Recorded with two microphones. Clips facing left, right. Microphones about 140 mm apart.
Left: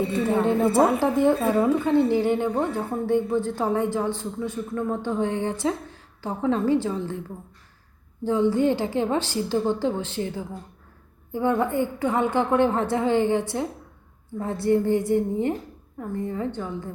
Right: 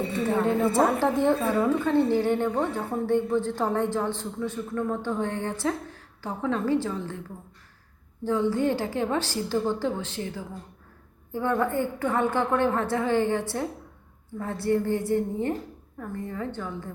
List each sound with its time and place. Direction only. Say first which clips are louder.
0.7 s a woman's voice: left 3 dB; 15° left (ahead or behind)
8.2 s a woman's voice: left 3 dB; 20° left (ahead or behind)